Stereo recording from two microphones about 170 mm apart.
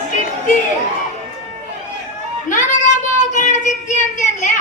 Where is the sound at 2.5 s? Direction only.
45° left (ahead or behind).